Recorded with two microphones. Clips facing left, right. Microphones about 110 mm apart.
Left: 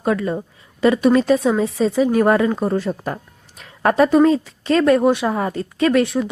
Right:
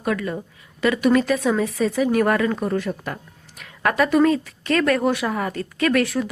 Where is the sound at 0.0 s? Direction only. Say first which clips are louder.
Left 4 dB; 30° left (ahead or behind).